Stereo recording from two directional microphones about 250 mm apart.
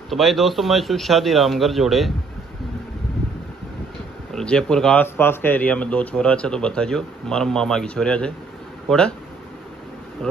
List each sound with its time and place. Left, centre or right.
0.1 s speech: centre
4.3 s speech: centre